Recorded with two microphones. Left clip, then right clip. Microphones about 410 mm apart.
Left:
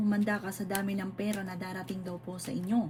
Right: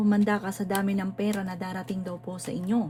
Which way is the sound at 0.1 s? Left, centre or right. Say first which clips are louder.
Right 6 dB; right.